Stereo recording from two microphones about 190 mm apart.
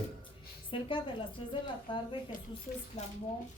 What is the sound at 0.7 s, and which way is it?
Speech, 25° left (ahead or behind).